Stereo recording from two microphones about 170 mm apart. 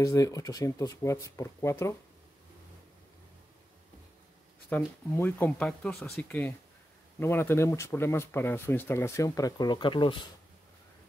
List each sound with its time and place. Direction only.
0.0 s speech: 20° left (ahead or behind)
4.7 s speech: 10° left (ahead or behind); by 10.1 s 30° left (ahead or behind)